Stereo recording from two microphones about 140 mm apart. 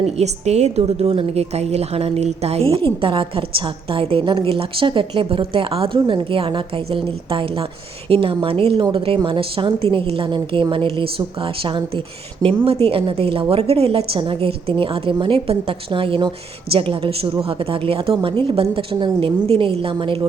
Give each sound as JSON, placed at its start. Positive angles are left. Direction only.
{"t": 0.0, "sound": "a woman's voice", "side_deg": -50}
{"t": 12.6, "sound": "a woman's voice", "side_deg": -45}